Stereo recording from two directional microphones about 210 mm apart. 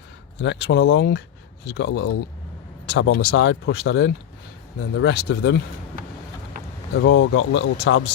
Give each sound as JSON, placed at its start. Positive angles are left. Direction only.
{"t": 0.3, "sound": "speech", "side_deg": 55}
{"t": 6.9, "sound": "speech", "side_deg": 65}